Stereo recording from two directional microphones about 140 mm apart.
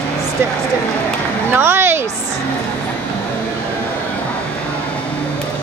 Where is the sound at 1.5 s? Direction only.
15° right (ahead or behind).